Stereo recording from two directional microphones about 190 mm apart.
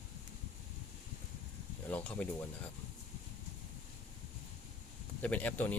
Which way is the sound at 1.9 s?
5° left (ahead or behind).